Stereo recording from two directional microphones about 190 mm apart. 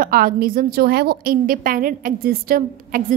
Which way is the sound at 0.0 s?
50° right (ahead or behind).